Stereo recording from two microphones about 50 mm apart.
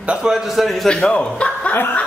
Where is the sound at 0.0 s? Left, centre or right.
Right.